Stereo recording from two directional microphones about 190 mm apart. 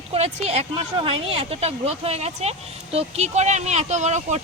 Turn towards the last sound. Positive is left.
turn(degrees=-40)  # may be behind; listen again after turning